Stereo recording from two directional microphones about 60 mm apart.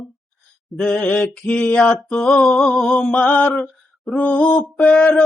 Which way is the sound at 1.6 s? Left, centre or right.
Left.